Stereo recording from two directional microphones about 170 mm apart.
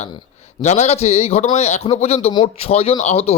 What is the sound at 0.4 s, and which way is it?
Speech, 40° left (ahead or behind).